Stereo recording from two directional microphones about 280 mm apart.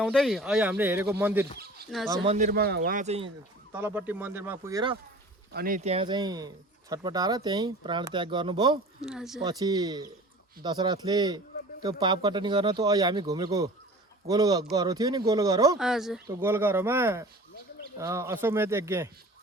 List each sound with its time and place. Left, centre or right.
0.0 s speech: centre
1.5 s speech: right
2.0 s speech: right
3.7 s speech: centre
5.5 s speech: right
9.0 s speech: centre
9.4 s speech: centre
15.8 s speech: centre